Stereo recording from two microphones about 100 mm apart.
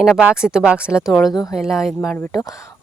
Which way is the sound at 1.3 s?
40° left (ahead or behind).